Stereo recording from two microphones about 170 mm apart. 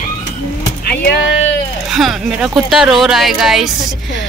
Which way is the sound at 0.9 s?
70° left (ahead or behind).